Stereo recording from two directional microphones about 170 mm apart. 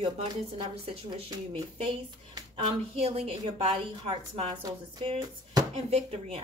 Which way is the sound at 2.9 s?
35° right (ahead or behind).